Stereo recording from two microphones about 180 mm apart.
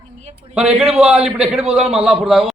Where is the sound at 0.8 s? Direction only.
35° right (ahead or behind).